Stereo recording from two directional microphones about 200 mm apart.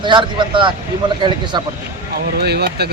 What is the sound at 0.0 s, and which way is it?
Speech, 25° right (ahead or behind).